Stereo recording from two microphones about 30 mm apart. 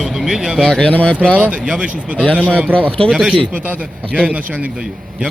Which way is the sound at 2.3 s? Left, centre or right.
Right.